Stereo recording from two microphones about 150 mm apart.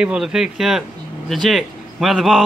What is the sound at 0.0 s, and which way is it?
Speech, 5° right (ahead or behind).